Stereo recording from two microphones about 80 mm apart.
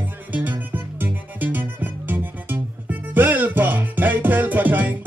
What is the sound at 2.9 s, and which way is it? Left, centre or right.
Music, right.